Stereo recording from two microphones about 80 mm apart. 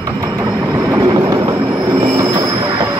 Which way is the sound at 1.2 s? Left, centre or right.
Right.